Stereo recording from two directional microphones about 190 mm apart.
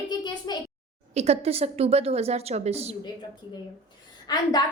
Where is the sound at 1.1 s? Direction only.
35° right (ahead or behind).